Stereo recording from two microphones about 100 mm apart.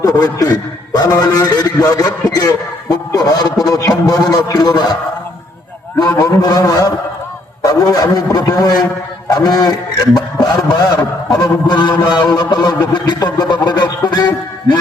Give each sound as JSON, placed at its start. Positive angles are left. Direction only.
{"t": 0.0, "sound": "a man's voice", "side_deg": 35}
{"t": 6.1, "sound": "a man's voice", "side_deg": 40}